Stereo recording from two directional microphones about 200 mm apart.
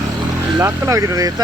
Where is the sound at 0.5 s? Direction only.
15° right (ahead or behind).